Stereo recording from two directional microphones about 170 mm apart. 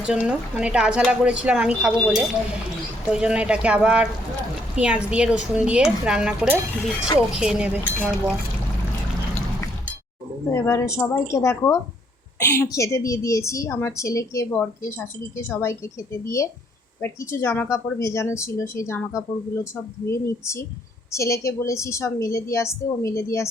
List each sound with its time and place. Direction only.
0.0 s speech: 5° right (ahead or behind)
10.5 s a woman's voice: 15° left (ahead or behind)